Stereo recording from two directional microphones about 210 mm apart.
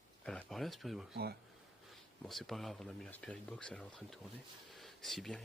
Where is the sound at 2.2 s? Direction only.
Centre (ahead or behind).